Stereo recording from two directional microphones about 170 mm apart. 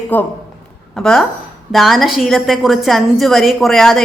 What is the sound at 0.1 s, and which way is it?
A woman's voice, 10° left (ahead or behind).